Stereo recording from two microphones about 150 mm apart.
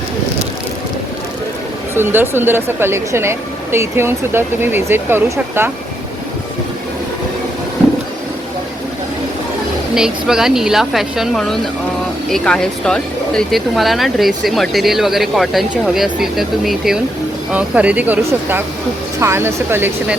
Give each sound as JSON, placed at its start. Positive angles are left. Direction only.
{"t": 2.0, "sound": "speech", "side_deg": -15}
{"t": 9.9, "sound": "speech", "side_deg": -5}